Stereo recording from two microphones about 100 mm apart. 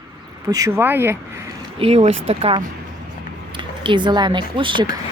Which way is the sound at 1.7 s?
80° right.